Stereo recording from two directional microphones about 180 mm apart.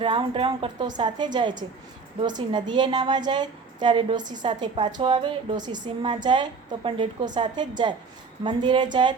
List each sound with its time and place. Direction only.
0.0 s a woman's voice: 25° right (ahead or behind)